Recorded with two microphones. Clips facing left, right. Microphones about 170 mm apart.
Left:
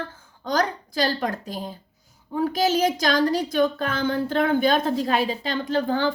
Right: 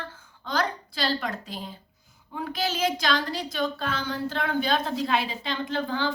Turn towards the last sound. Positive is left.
turn(degrees=45)  # may be behind; listen again after turning